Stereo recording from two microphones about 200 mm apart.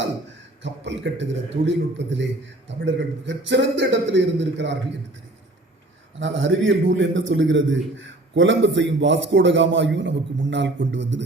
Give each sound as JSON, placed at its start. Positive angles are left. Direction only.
{"t": 0.6, "sound": "a man's voice", "side_deg": -60}
{"t": 6.1, "sound": "a man's voice", "side_deg": -70}